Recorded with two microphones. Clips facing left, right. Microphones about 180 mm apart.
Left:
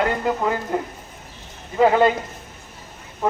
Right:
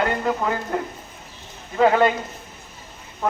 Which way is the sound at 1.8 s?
Centre (ahead or behind).